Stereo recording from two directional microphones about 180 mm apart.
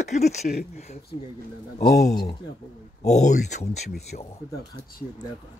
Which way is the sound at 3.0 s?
40° left (ahead or behind).